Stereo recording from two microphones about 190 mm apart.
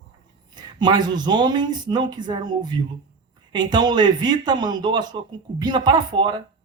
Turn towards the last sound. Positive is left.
turn(degrees=-25)  # may be behind; listen again after turning